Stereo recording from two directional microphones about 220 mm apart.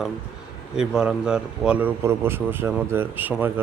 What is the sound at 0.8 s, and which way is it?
Speech, 5° right (ahead or behind).